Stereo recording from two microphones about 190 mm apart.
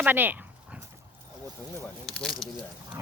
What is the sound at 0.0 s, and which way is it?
Dog, 10° right (ahead or behind).